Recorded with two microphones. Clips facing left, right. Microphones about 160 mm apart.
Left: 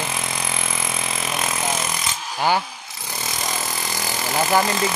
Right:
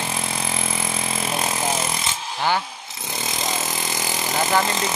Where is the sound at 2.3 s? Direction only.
10° left (ahead or behind).